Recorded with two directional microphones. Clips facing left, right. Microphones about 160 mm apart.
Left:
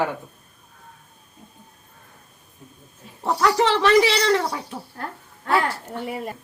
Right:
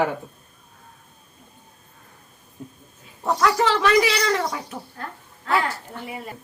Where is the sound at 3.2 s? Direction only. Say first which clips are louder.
Left 1 dB; 30° left (ahead or behind).